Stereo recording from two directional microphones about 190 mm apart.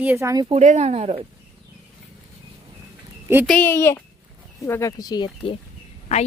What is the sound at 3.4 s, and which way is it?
Speech, 10° left (ahead or behind).